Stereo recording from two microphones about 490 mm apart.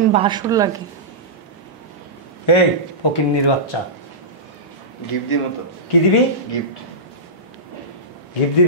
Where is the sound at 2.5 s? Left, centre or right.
Left.